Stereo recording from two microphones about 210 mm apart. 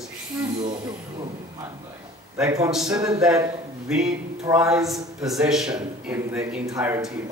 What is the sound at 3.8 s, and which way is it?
Speech, 5° right (ahead or behind).